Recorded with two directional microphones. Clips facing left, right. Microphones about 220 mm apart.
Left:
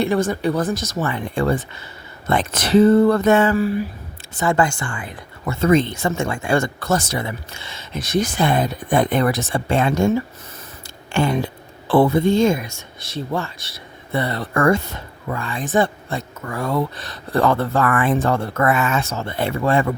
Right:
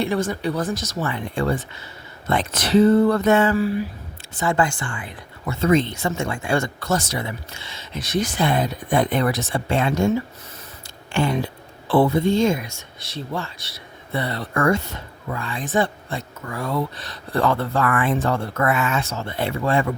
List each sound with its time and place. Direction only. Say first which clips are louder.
0.0 s speech: left 3 dB; 45° left (ahead or behind)
11.1 s speech: left 2 dB; 45° left (ahead or behind)
15.3 s speech: left 3 dB; 50° left (ahead or behind)